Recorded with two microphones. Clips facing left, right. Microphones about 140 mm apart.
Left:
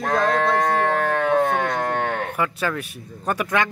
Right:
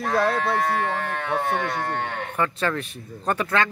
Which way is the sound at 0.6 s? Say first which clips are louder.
Left 4 dB; 45° left (ahead or behind).